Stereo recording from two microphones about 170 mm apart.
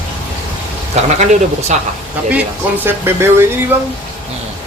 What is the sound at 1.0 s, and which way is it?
Speech, 40° right (ahead or behind).